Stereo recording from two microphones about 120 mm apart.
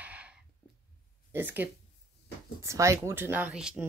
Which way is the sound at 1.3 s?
15° right (ahead or behind).